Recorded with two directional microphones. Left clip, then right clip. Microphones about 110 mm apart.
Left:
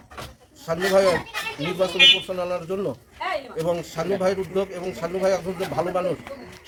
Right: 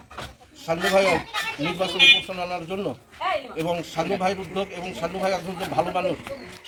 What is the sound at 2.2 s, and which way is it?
A man's voice, 40° left (ahead or behind).